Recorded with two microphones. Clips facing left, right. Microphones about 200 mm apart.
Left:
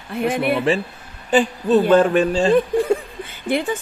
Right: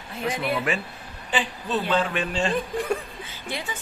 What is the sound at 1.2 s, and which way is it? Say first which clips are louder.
Speech: left 11 dB; 45° left (ahead or behind).